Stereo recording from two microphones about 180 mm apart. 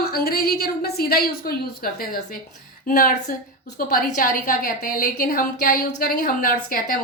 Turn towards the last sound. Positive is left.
turn(degrees=50)  # may be behind; listen again after turning